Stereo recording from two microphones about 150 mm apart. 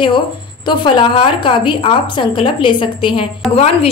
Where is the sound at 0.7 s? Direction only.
30° left (ahead or behind).